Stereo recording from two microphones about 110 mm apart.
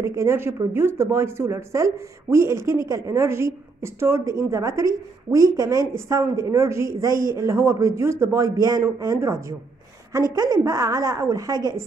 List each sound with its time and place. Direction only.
0.0 s speech: 25° right (ahead or behind)